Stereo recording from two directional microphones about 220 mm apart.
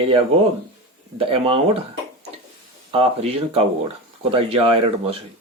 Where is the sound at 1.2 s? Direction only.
25° right (ahead or behind).